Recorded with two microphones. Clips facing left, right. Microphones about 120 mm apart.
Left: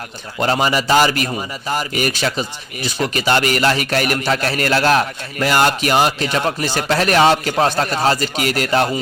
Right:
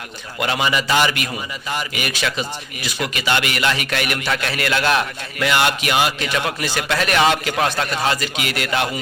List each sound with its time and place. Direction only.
0.3 s a man's voice: 35° left (ahead or behind)